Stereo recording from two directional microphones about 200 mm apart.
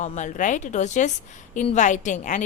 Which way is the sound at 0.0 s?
35° left (ahead or behind).